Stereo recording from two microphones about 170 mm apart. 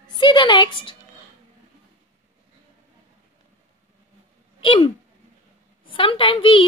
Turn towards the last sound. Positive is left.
turn(degrees=30)  # may be behind; listen again after turning